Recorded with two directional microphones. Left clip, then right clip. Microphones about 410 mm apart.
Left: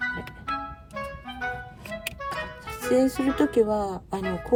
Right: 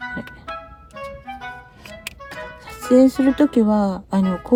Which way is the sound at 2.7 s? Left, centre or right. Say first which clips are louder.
Right 8 dB; right.